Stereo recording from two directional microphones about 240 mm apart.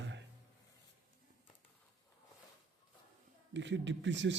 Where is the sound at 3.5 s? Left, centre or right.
Right.